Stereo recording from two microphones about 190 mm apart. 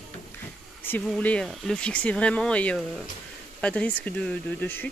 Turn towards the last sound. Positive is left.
turn(degrees=10)  # may be behind; listen again after turning